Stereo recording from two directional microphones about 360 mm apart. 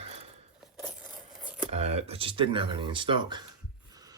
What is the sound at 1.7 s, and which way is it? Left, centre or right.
Speech, centre.